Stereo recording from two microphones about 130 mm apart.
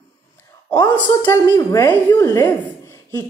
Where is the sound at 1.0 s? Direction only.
30° left (ahead or behind).